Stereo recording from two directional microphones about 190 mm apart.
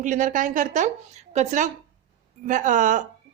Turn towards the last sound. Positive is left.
turn(degrees=-40)  # may be behind; listen again after turning